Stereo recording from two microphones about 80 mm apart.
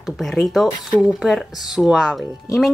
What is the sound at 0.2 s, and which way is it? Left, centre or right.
Speech, centre.